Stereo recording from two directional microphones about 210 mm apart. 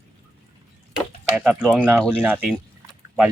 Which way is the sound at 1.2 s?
10° right (ahead or behind).